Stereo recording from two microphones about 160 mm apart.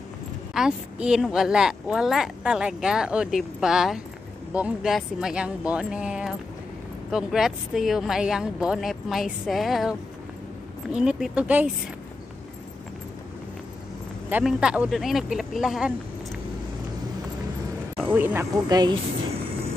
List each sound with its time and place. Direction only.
0.6 s a woman's voice: 5° right (ahead or behind)
14.3 s a woman's voice: 5° right (ahead or behind)
17.9 s speech: 10° right (ahead or behind)